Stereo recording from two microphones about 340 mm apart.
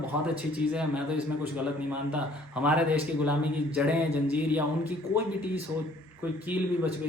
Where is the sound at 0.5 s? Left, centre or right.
Centre.